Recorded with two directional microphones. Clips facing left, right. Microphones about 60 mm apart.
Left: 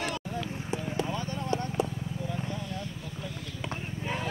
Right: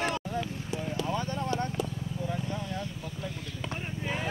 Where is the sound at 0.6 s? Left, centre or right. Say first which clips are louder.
Left 1 dB; left.